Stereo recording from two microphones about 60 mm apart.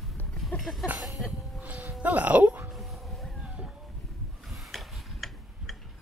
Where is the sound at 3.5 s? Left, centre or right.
Centre.